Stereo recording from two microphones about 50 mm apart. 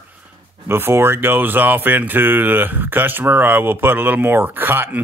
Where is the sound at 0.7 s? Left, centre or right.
Right.